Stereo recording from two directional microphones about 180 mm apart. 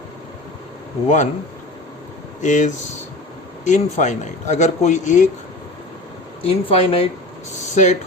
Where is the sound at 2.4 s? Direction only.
45° left (ahead or behind).